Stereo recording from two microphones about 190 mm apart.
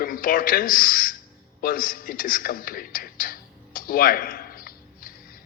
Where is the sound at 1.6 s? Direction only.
45° left (ahead or behind).